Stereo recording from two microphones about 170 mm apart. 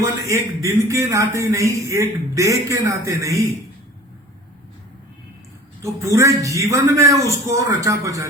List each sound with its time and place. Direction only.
0.0 s a man's voice: 15° right (ahead or behind)
5.8 s a man's voice: 15° right (ahead or behind)